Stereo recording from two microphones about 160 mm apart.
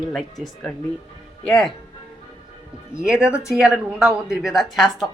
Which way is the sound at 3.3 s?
20° left (ahead or behind).